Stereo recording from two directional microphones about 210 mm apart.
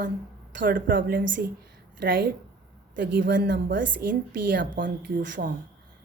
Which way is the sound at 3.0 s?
60° right (ahead or behind).